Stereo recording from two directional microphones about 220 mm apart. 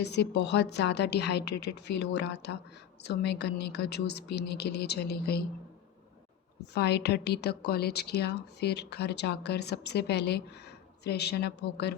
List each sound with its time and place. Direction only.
0.0 s a woman's voice: 50° left (ahead or behind)
6.7 s a woman's voice: 50° left (ahead or behind)